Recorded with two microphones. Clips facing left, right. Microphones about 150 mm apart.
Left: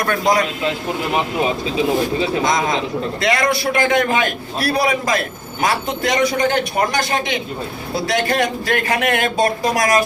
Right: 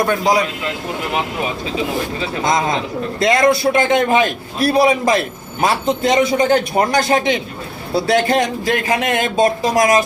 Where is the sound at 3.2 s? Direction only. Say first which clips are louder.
Right 6 dB; 25° right (ahead or behind).